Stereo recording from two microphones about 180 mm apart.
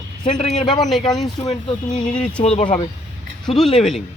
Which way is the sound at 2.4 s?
35° left (ahead or behind).